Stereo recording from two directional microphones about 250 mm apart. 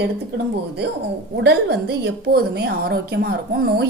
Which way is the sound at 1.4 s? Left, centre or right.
Right.